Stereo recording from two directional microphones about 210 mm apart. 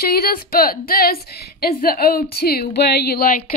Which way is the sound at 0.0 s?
45° left (ahead or behind).